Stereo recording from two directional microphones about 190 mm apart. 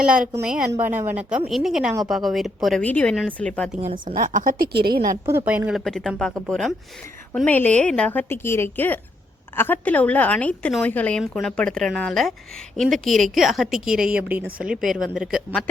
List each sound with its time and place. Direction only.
0.4 s a woman's voice: 5° right (ahead or behind)
3.9 s a woman's voice: 45° right (ahead or behind)
5.5 s a woman's voice: 5° right (ahead or behind)